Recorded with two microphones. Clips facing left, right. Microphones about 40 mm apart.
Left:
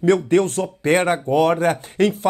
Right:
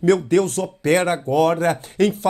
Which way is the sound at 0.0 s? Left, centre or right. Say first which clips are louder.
Even; left.